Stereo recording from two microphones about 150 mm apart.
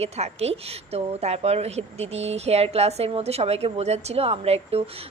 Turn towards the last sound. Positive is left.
turn(degrees=-40)  # may be behind; listen again after turning